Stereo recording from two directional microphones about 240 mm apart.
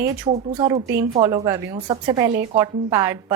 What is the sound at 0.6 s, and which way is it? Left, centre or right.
A woman's voice, centre.